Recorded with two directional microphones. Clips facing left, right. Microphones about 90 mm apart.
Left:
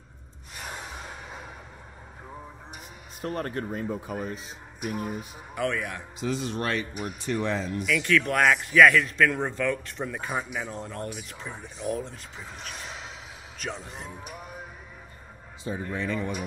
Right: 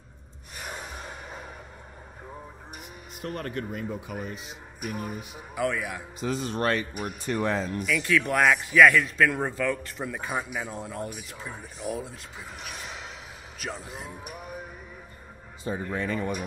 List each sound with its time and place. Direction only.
0.6 s music: centre (ahead or behind)
3.2 s speech: 35° left (ahead or behind)
5.5 s a man's voice: 5° right (ahead or behind)
6.2 s speech: 45° right (ahead or behind)
7.8 s a man's voice: centre (ahead or behind)
15.6 s speech: 45° right (ahead or behind)